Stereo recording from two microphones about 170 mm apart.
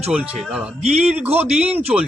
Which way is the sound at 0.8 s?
40° right (ahead or behind).